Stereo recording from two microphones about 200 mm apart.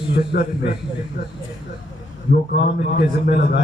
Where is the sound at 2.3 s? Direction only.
50° left (ahead or behind).